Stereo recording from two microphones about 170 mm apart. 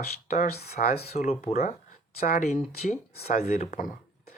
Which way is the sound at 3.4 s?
40° left (ahead or behind).